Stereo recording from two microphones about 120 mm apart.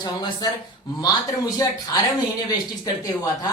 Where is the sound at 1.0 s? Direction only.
30° left (ahead or behind).